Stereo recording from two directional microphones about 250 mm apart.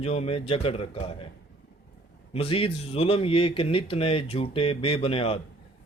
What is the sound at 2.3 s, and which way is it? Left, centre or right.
Speech, left.